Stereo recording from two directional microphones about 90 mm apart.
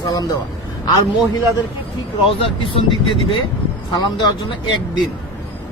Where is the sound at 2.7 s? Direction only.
75° left (ahead or behind).